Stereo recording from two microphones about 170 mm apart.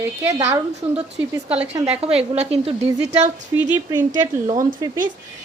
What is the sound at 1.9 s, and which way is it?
Speech, 35° right (ahead or behind).